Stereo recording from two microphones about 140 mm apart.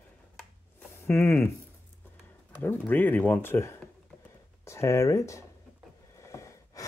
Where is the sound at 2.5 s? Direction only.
15° left (ahead or behind).